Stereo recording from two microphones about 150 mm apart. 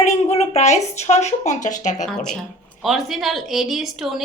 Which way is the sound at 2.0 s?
5° left (ahead or behind).